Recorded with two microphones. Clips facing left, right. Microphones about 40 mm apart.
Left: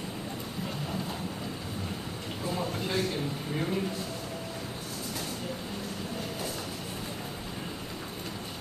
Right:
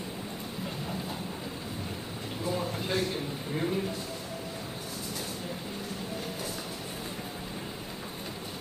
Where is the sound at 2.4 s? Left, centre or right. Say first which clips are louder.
Even; centre.